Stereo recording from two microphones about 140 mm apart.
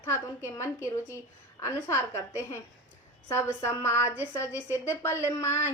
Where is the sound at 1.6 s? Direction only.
20° left (ahead or behind).